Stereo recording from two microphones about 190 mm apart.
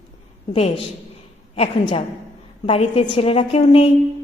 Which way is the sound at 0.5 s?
30° left (ahead or behind).